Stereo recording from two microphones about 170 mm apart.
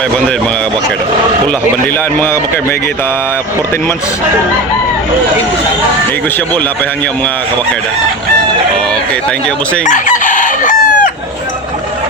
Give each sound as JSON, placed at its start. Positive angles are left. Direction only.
{"t": 1.5, "sound": "a man's voice", "side_deg": 10}
{"t": 9.8, "sound": "chicken", "side_deg": 50}